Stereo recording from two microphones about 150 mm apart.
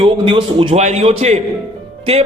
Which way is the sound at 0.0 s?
35° right (ahead or behind).